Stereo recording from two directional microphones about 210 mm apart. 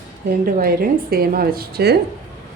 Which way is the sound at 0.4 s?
45° right (ahead or behind).